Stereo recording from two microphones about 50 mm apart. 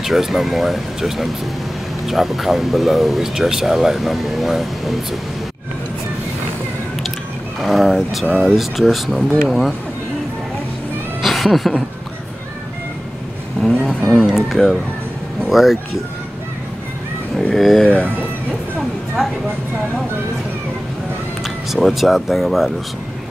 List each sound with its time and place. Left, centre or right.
0.0 s speech: centre
7.6 s speech: centre
11.2 s cat: centre
13.6 s vehicle: centre
15.5 s speech: centre
17.6 s speech: centre
17.8 s speech: left
21.7 s speech: centre